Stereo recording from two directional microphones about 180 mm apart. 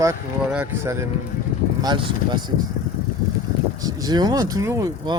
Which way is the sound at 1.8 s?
25° right (ahead or behind).